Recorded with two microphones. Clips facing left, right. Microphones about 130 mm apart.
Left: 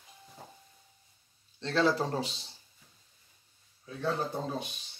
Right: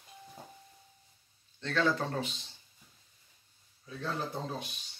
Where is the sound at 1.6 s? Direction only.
35° left (ahead or behind).